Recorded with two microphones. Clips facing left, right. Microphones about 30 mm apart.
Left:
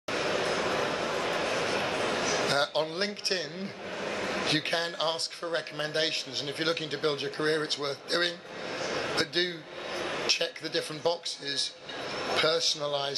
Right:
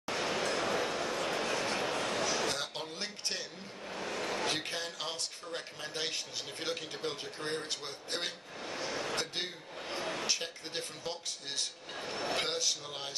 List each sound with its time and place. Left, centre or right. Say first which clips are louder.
0.1 s a sound: left 4 dB; left
2.5 s speech: left 10 dB; left
3.9 s speech: left 3 dB; left